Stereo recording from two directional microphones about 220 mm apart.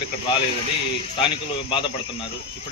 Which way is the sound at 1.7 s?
25° left (ahead or behind).